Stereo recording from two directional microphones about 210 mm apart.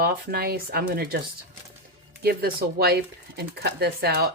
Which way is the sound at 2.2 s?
45° right (ahead or behind).